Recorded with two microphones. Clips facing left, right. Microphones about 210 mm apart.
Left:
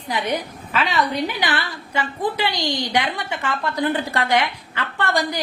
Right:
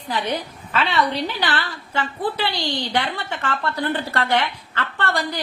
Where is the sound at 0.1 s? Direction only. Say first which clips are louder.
Left 1 dB; 10° left (ahead or behind).